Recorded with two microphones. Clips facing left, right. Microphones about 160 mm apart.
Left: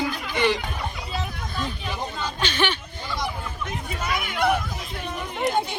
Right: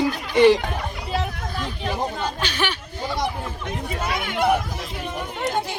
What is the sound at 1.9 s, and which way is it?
Speech, 50° right (ahead or behind).